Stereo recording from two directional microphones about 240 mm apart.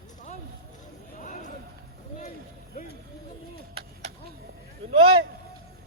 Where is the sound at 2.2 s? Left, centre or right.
Left.